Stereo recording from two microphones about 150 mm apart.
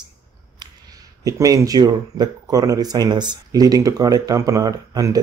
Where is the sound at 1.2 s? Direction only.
25° right (ahead or behind).